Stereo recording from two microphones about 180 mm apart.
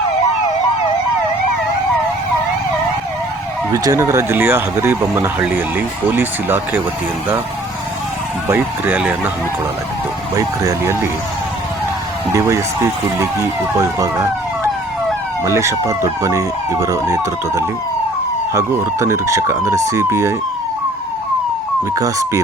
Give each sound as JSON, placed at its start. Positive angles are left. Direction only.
{"t": 3.7, "sound": "speech", "side_deg": -15}
{"t": 8.4, "sound": "speech", "side_deg": -10}
{"t": 10.3, "sound": "speech", "side_deg": -20}
{"t": 12.3, "sound": "speech", "side_deg": -15}
{"t": 21.9, "sound": "speech", "side_deg": -20}